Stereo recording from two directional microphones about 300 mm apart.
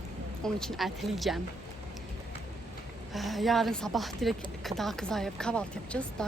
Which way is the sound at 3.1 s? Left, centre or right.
Centre.